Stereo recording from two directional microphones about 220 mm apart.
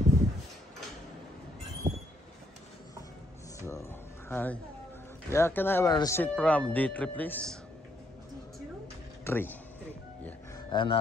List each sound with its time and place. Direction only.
1.8 s train: 15° right (ahead or behind)
3.6 s a sound: 10° left (ahead or behind)
5.3 s speech: 10° left (ahead or behind)
9.2 s speech: 10° left (ahead or behind)
10.2 s music: 20° left (ahead or behind)